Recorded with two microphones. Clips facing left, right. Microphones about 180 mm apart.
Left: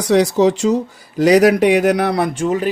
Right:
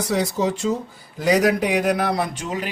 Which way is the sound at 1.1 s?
75° left (ahead or behind).